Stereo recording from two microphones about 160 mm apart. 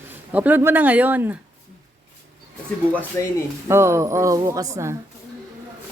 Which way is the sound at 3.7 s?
15° right (ahead or behind).